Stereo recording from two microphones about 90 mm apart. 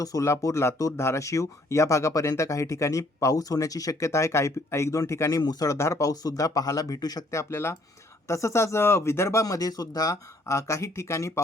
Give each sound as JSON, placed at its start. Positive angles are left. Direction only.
{"t": 0.0, "sound": "speech", "side_deg": 40}
{"t": 5.4, "sound": "speech", "side_deg": 45}